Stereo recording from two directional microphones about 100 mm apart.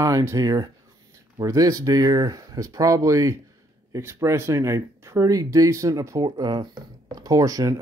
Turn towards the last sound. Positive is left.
turn(degrees=-35)  # may be behind; listen again after turning